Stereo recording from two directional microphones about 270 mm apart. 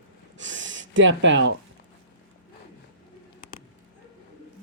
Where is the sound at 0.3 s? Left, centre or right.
Right.